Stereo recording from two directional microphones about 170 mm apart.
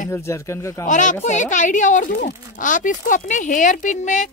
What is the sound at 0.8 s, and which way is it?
A woman's voice, 50° left (ahead or behind).